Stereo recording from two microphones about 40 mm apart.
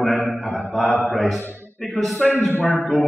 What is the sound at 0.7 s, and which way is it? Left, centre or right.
A man's voice, centre.